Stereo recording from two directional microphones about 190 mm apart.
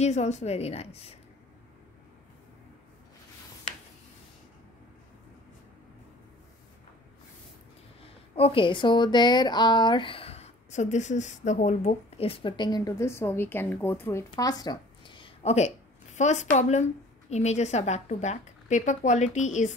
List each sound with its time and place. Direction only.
0.0 s a woman's voice: 35° left (ahead or behind)
8.0 s a woman's voice: 30° left (ahead or behind)